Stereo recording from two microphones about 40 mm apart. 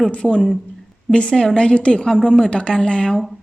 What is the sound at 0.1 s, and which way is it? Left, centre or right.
A woman's voice, left.